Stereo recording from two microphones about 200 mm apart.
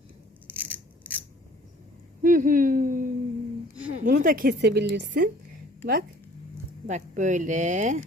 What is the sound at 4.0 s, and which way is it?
Speech, 45° right (ahead or behind).